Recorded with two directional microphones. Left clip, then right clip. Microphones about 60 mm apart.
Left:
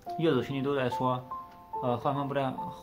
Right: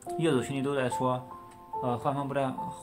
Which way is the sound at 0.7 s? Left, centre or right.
Centre.